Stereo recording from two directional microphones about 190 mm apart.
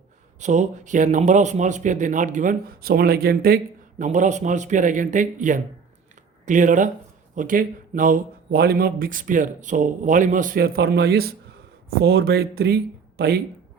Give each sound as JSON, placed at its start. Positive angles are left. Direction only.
{"t": 0.3, "sound": "speech", "side_deg": -40}